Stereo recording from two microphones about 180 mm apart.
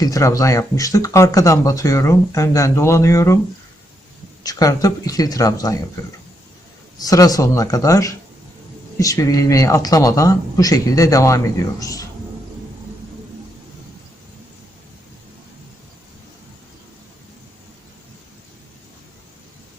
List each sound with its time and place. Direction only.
0.0 s speech: 15° left (ahead or behind)
4.4 s speech: 20° left (ahead or behind)
7.0 s speech: 20° left (ahead or behind)